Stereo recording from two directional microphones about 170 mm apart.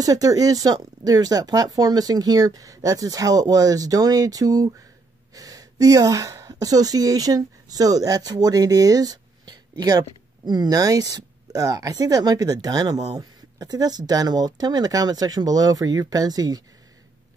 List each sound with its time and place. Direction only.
0.0 s speech: 20° right (ahead or behind)